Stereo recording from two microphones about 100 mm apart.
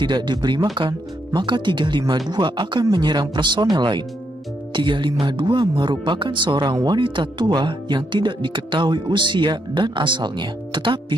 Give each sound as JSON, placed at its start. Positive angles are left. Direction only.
{"t": 0.0, "sound": "speech", "side_deg": -50}